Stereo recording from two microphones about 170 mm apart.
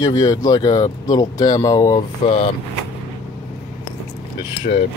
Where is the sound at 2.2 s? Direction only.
35° left (ahead or behind).